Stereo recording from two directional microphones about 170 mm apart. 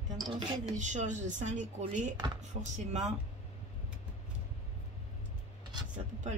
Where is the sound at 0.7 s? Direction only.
45° right (ahead or behind).